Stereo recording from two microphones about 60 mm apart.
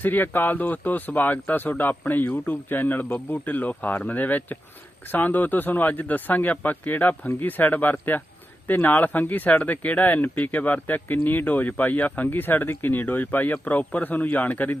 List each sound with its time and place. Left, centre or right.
0.0 s speech: left